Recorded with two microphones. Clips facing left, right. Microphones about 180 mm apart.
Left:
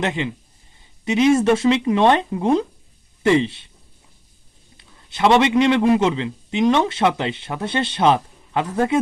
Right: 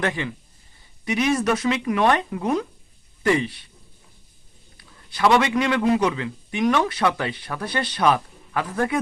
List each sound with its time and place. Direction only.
0.0 s a man's voice: 20° left (ahead or behind)
4.8 s a man's voice: 25° left (ahead or behind)